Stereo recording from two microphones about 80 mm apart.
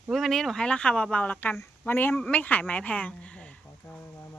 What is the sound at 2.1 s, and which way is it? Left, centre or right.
A woman's voice, centre.